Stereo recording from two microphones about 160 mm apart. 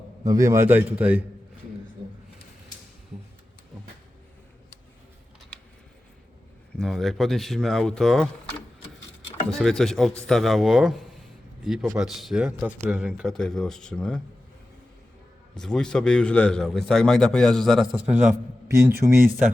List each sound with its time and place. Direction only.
0.3 s a man's voice: 20° right (ahead or behind)
6.7 s a man's voice: centre (ahead or behind)
9.5 s a man's voice: centre (ahead or behind)
15.5 s a man's voice: 5° left (ahead or behind)